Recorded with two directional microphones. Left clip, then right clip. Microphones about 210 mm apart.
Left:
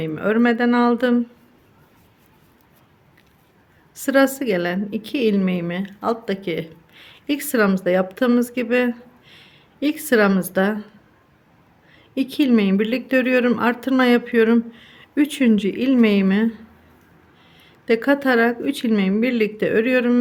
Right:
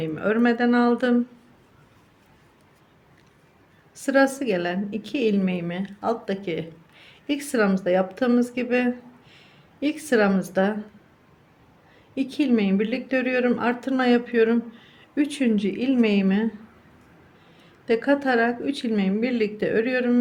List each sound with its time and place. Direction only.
0.0 s speech: 20° left (ahead or behind)
3.9 s a woman's voice: 20° left (ahead or behind)
12.1 s speech: 25° left (ahead or behind)
17.6 s speech: 25° left (ahead or behind)